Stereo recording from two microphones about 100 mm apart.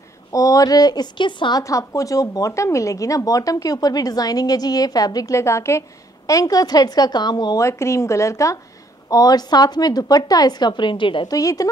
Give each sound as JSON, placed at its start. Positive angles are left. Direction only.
{"t": 0.3, "sound": "speech", "side_deg": 35}
{"t": 1.6, "sound": "speech", "side_deg": 30}
{"t": 7.6, "sound": "a woman's voice", "side_deg": 30}
{"t": 11.2, "sound": "speech", "side_deg": 35}